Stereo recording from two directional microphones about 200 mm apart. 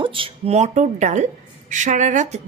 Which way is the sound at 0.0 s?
25° right (ahead or behind).